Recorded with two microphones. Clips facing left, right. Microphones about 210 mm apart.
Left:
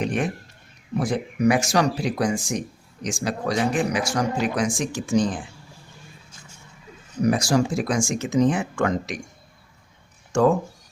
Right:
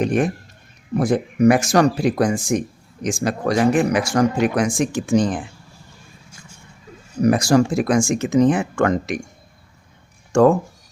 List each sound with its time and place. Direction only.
0.0 s a sound: 45° right (ahead or behind)
0.9 s speech: 50° right (ahead or behind)
7.3 s speech: 60° right (ahead or behind)